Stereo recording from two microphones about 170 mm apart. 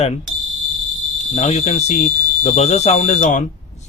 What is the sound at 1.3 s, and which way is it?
A man's voice, 40° left (ahead or behind).